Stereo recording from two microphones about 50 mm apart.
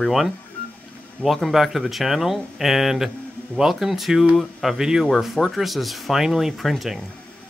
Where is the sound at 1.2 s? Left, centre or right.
Left.